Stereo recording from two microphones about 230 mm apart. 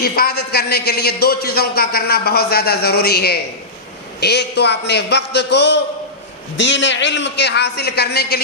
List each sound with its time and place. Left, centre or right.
0.0 s a man's voice: left